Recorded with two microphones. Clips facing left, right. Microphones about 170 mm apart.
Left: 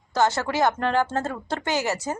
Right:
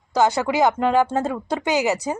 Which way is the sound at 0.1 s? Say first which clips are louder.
Right 4 dB; 15° right (ahead or behind).